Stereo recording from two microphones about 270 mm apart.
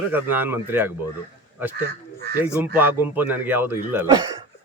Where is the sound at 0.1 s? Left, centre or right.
Centre.